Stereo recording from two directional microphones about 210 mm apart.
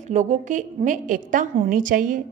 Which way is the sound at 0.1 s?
35° right (ahead or behind).